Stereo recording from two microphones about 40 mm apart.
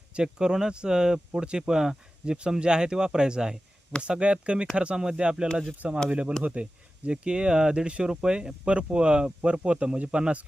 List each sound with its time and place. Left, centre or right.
0.1 s speech: centre
2.2 s speech: right